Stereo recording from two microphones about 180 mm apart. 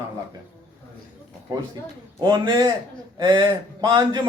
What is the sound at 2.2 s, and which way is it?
A man's voice, 25° right (ahead or behind).